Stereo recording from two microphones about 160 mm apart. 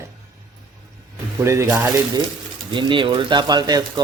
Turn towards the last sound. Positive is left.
turn(degrees=-25)  # may be behind; listen again after turning